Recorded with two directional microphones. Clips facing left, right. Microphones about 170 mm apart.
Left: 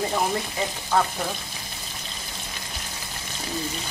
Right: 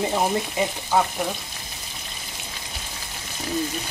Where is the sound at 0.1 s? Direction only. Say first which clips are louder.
Right 2 dB; 20° right (ahead or behind).